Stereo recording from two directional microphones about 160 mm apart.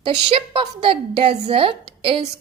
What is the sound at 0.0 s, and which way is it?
A woman's voice, 35° right (ahead or behind).